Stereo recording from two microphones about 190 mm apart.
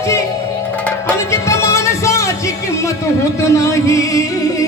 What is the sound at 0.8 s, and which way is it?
Music, 10° left (ahead or behind).